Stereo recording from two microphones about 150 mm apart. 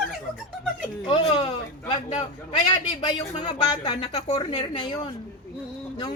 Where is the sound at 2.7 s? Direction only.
30° left (ahead or behind).